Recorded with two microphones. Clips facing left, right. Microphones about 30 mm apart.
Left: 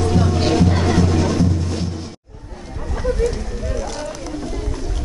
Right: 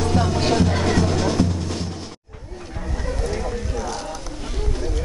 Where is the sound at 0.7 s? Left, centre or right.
Centre.